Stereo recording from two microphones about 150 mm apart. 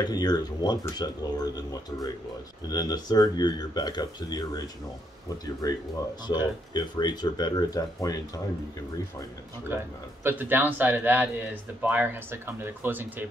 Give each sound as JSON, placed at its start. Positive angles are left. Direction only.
{"t": 0.0, "sound": "speech", "side_deg": 25}
{"t": 10.2, "sound": "speech", "side_deg": -15}